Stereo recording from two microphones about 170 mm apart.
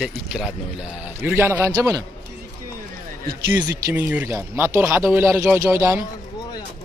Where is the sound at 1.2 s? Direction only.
10° right (ahead or behind).